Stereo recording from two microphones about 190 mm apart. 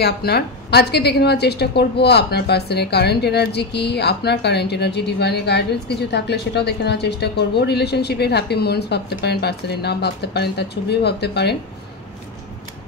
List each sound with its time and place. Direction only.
0.0 s a woman's voice: 55° left (ahead or behind)